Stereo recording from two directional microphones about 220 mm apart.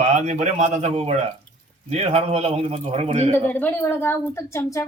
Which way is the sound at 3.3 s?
10° left (ahead or behind).